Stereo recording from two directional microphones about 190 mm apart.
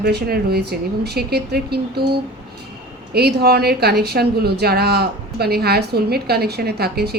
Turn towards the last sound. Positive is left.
turn(degrees=-55)  # may be behind; listen again after turning